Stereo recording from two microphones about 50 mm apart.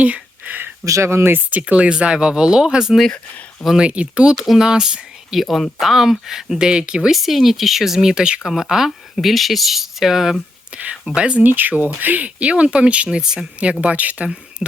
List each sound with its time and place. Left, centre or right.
0.0 s a sound: right
0.9 s speech: right
1.5 s speech: right
4.4 s speech: centre
5.4 s speech: centre
9.1 s speech: centre
10.8 s speech: right
11.4 s speech: right; by 13.4 s centre
13.8 s speech: right